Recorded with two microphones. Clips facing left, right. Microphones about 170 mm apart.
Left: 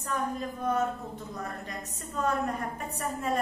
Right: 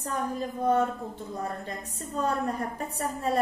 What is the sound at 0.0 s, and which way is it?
A woman's voice, 30° right (ahead or behind).